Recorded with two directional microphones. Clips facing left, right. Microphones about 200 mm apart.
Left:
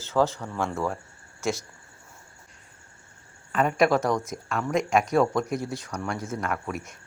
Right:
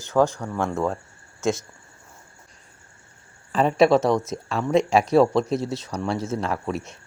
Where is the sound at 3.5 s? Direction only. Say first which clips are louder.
Right 4 dB; 30° right (ahead or behind).